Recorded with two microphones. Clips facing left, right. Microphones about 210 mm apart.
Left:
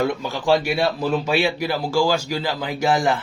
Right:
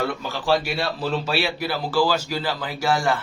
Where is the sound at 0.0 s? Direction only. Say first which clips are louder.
Left 4 dB; 15° left (ahead or behind).